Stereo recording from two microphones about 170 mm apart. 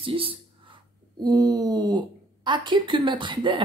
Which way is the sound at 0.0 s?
30° right (ahead or behind).